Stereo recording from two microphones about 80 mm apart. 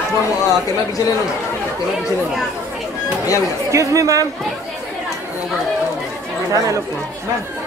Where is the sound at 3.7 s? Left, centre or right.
Right.